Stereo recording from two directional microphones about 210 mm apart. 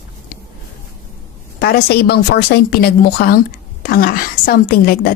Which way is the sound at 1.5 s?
45° left (ahead or behind).